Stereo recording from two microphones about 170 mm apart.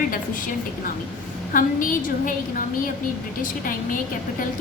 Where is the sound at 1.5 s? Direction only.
55° left (ahead or behind).